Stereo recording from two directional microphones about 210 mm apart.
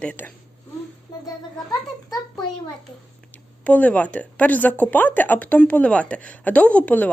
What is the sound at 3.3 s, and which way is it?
A child's voice, 5° left (ahead or behind).